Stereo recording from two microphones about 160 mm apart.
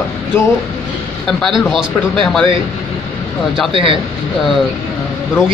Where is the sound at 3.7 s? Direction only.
35° right (ahead or behind).